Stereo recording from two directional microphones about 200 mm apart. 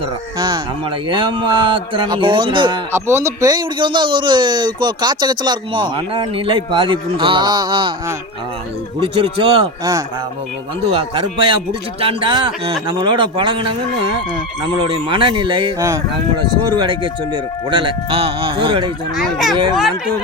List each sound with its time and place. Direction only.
0.3 s speech: 20° right (ahead or behind)
2.9 s speech: 15° right (ahead or behind)
9.0 s speech: 25° right (ahead or behind)
15.1 s speech: 25° right (ahead or behind)
19.1 s speech: centre (ahead or behind)